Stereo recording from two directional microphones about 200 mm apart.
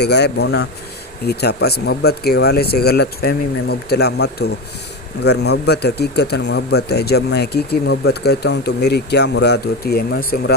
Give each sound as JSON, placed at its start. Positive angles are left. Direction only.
{"t": 0.0, "sound": "speech", "side_deg": 55}